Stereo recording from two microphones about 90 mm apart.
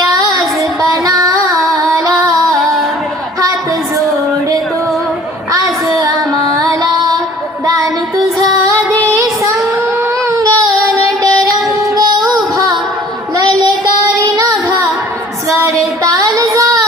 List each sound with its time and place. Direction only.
0.1 s child singing: 50° right (ahead or behind)
0.8 s music: 45° right (ahead or behind)
1.5 s music: centre (ahead or behind)
6.0 s music: 45° right (ahead or behind)
8.4 s music: 40° right (ahead or behind)
10.2 s child singing: 35° right (ahead or behind)
11.2 s music: 40° right (ahead or behind)
13.3 s child singing: 45° right (ahead or behind)
14.3 s music: 40° right (ahead or behind)
15.4 s child singing: 40° right (ahead or behind)